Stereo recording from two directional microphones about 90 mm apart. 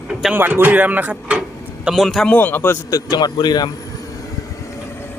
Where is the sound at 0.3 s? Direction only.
20° right (ahead or behind); by 2.3 s 5° left (ahead or behind).